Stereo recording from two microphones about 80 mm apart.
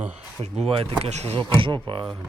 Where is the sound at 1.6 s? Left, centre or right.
Right.